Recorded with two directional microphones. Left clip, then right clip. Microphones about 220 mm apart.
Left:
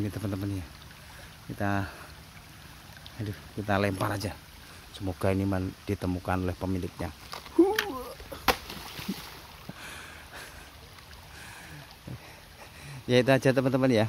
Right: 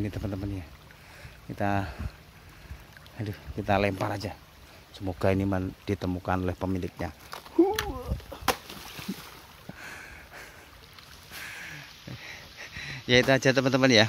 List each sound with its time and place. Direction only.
0.0 s speech: 10° right (ahead or behind)
1.6 s speech: 10° right (ahead or behind)
3.3 s speech: 10° right (ahead or behind)
7.5 s a sound: centre (ahead or behind)
9.8 s a sound: 5° right (ahead or behind)
12.8 s speech: centre (ahead or behind)